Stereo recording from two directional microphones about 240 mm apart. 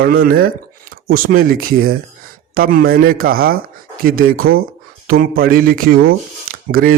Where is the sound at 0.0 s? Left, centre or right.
Right.